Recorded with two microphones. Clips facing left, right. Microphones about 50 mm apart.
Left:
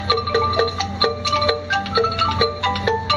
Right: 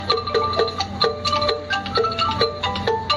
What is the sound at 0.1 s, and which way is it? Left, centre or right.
Music, centre.